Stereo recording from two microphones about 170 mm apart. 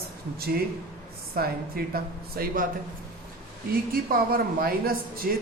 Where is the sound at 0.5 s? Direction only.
65° right (ahead or behind).